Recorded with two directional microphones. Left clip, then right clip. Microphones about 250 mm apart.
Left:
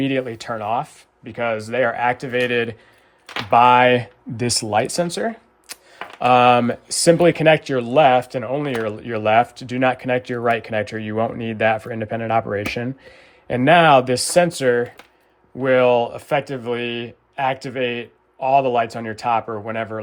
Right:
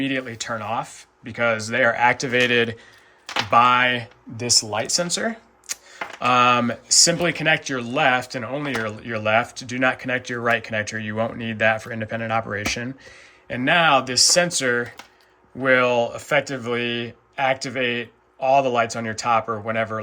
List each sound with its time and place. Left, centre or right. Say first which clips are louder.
0.0 s speech: left 3 dB; centre
3.5 s speech: left 4 dB; centre; by 4.6 s left
4.7 s speech: left 4 dB; centre